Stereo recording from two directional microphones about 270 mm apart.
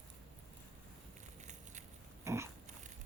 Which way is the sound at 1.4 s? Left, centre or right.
Right.